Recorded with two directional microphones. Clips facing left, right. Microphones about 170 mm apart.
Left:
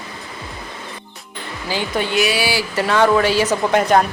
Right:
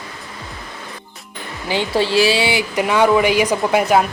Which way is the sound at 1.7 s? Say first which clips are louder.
Right 3 dB; 25° right (ahead or behind).